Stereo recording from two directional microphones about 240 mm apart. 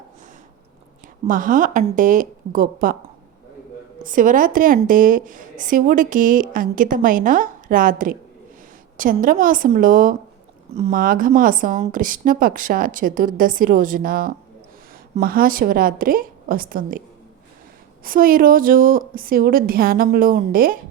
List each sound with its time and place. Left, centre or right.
1.3 s a woman's voice: right
4.0 s a woman's voice: right
18.0 s a woman's voice: right